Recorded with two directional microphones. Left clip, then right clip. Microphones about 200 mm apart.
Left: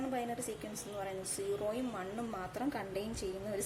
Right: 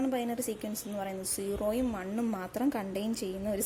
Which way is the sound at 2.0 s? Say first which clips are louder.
Right 5 dB; 40° right (ahead or behind).